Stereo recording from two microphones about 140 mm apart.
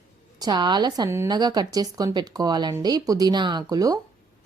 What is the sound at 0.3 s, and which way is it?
A woman's voice, 30° right (ahead or behind).